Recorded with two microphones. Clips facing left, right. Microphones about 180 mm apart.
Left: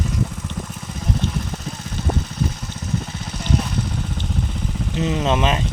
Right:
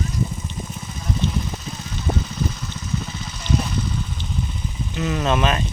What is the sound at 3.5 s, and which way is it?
Vehicle, 65° left (ahead or behind).